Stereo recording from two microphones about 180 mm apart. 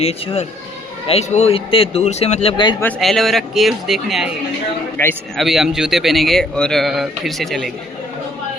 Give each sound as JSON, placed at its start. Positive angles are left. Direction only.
{"t": 0.0, "sound": "speech", "side_deg": 35}
{"t": 2.8, "sound": "a man's voice", "side_deg": 0}
{"t": 5.0, "sound": "a man's voice", "side_deg": 15}
{"t": 5.4, "sound": "a man's voice", "side_deg": 0}